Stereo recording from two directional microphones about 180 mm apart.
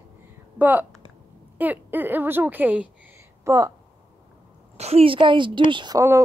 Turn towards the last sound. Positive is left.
turn(degrees=-20)  # may be behind; listen again after turning